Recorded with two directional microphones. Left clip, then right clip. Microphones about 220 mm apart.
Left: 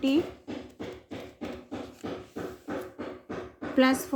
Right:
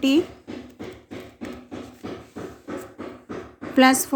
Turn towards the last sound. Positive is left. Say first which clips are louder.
# right 7 dB
turn(degrees=-50)  # may be behind; listen again after turning